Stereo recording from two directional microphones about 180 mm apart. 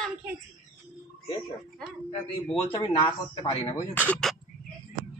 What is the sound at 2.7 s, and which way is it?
Speech, 25° left (ahead or behind).